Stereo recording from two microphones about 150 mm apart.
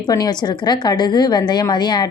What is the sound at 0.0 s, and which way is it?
Speech, 25° left (ahead or behind).